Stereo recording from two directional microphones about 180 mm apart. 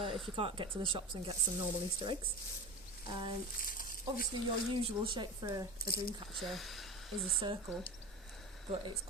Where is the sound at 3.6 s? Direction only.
50° left (ahead or behind).